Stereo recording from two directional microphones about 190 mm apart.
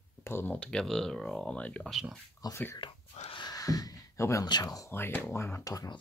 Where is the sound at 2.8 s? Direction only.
30° left (ahead or behind).